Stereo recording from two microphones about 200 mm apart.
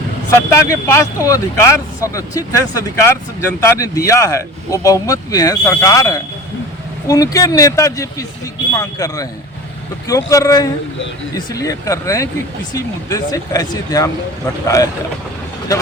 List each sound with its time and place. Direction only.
0.5 s speech: 15° left (ahead or behind)
15.7 s speech: 15° left (ahead or behind)